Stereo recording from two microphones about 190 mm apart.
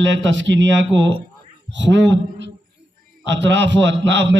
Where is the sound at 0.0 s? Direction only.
75° right (ahead or behind).